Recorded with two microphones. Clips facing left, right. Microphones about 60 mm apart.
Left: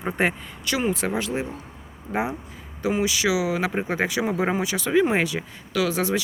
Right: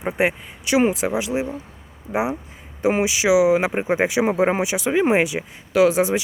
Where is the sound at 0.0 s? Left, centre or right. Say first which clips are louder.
Right 3 dB; centre.